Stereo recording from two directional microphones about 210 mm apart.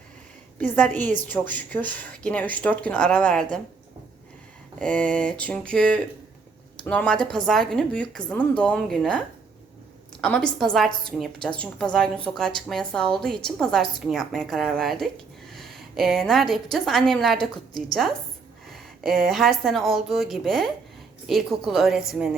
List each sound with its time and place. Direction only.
1.5 s speech: 10° left (ahead or behind)
4.8 s a woman's voice: 5° left (ahead or behind)